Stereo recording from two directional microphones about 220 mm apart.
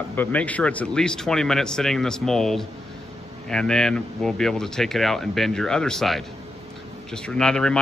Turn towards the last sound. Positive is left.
turn(degrees=5)  # may be behind; listen again after turning